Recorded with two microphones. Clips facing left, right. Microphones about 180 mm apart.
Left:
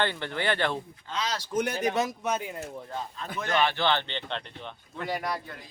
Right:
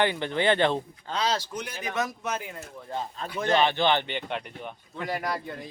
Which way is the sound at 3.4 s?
25° right (ahead or behind).